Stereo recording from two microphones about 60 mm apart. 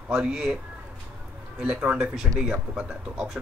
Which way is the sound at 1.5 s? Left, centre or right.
Centre.